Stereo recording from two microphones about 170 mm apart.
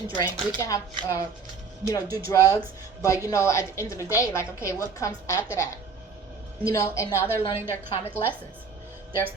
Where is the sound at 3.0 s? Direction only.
20° left (ahead or behind).